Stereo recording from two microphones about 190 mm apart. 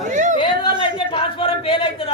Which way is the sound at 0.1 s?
40° right (ahead or behind).